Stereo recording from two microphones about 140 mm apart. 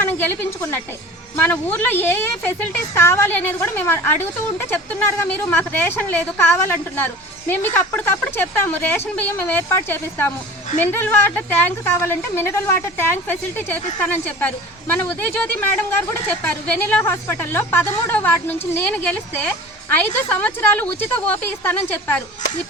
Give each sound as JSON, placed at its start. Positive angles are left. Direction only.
{"t": 0.0, "sound": "a woman's voice", "side_deg": 15}